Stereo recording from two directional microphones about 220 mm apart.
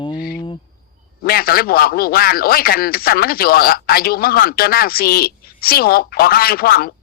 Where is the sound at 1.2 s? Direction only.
45° left (ahead or behind).